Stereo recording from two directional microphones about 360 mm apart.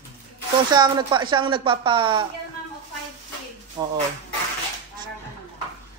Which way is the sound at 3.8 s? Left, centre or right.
Centre.